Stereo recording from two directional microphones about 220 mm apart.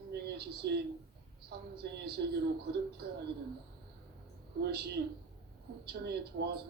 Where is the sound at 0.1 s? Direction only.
45° right (ahead or behind).